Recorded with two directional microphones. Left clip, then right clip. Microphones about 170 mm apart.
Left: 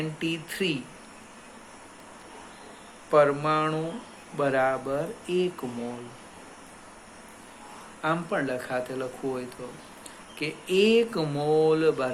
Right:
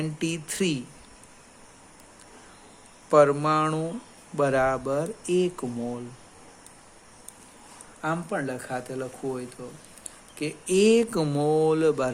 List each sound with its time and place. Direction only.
0.2 s speech: 65° right (ahead or behind)
3.1 s speech: 60° right (ahead or behind)
8.0 s speech: 45° right (ahead or behind)